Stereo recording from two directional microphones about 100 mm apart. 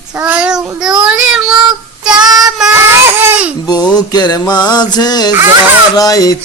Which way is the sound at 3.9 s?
45° left (ahead or behind).